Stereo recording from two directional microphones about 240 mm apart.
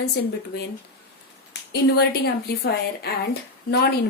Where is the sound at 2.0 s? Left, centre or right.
Left.